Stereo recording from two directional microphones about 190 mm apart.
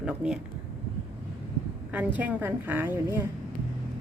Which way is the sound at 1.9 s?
10° right (ahead or behind).